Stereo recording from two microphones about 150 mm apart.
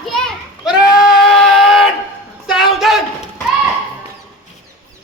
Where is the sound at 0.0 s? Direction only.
5° left (ahead or behind).